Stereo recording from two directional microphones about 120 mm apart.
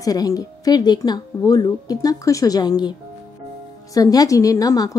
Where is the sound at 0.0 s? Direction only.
30° left (ahead or behind).